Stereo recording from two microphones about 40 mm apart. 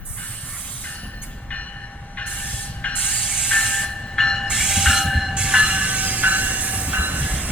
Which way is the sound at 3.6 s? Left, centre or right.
Centre.